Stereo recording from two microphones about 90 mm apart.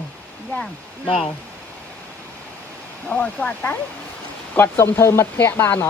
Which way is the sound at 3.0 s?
10° left (ahead or behind).